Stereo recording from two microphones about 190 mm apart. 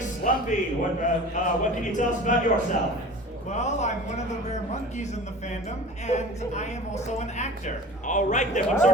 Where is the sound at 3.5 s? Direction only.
35° left (ahead or behind).